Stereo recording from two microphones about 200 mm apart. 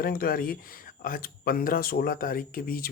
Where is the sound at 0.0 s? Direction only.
50° left (ahead or behind).